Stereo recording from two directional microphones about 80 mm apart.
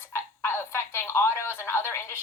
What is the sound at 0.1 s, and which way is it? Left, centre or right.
A woman's voice, left.